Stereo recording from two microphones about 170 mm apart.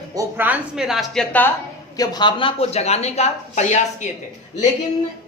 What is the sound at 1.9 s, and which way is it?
Speech, 25° left (ahead or behind).